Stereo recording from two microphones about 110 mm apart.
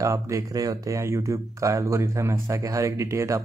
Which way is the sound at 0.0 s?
30° right (ahead or behind).